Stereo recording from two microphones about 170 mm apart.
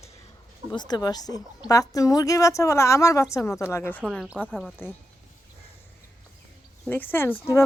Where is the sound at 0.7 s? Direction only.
25° left (ahead or behind); by 4.7 s 5° right (ahead or behind).